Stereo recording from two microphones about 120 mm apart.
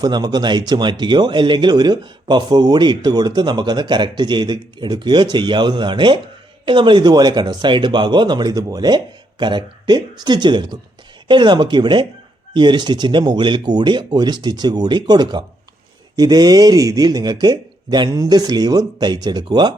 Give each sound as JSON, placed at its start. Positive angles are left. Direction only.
{"t": 0.0, "sound": "speech", "side_deg": -35}